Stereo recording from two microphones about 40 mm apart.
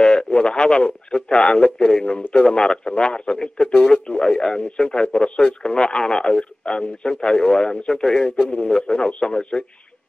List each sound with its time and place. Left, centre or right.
0.0 s speech: left
8.4 s speech: left